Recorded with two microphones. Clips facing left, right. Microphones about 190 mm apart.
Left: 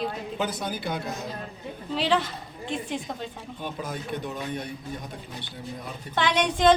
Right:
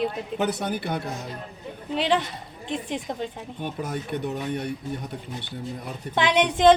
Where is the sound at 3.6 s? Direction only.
70° right (ahead or behind).